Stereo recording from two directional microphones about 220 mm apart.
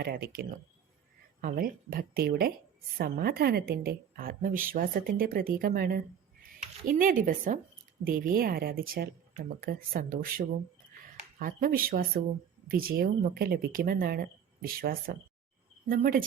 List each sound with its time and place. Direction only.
0.0 s speech: 45° right (ahead or behind)